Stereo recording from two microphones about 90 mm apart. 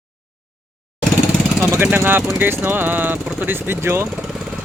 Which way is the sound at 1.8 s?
20° right (ahead or behind).